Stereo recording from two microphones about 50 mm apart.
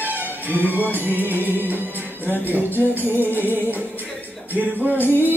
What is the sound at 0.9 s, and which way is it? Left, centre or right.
Music, right.